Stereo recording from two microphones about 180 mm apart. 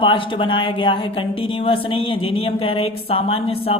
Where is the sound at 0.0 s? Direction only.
30° left (ahead or behind).